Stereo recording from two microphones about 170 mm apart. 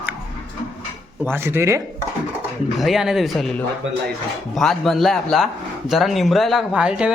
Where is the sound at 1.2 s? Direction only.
15° right (ahead or behind).